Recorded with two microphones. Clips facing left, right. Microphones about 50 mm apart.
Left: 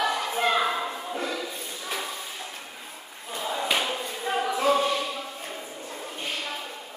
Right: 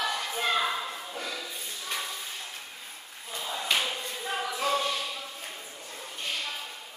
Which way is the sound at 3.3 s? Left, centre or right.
Centre.